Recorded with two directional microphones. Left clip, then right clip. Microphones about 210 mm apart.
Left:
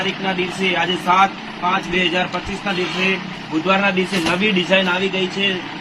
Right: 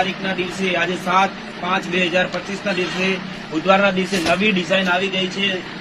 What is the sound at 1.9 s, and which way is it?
Speech, 15° left (ahead or behind).